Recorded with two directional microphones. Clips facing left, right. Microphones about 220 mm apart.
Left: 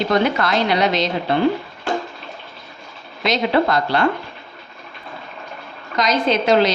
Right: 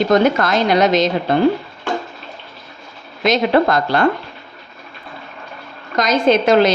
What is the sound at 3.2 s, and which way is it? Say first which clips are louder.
Speech: right 4 dB; 50° right (ahead or behind).